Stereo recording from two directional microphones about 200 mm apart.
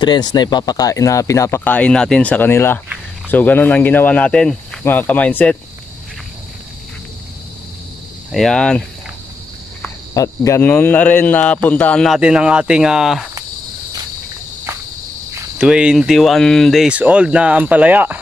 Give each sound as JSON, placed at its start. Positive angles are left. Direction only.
{"t": 0.0, "sound": "speech", "side_deg": 20}
{"t": 8.3, "sound": "speech", "side_deg": 0}
{"t": 10.1, "sound": "speech", "side_deg": 15}
{"t": 15.5, "sound": "speech", "side_deg": -5}